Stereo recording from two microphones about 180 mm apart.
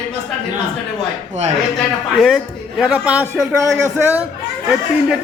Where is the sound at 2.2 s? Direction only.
Centre (ahead or behind).